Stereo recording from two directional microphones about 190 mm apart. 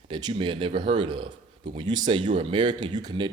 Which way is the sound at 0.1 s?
20° right (ahead or behind).